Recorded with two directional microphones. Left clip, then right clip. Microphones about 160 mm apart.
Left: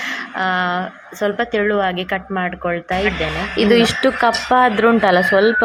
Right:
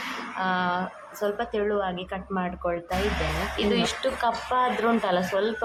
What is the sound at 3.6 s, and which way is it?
Speech, 35° left (ahead or behind).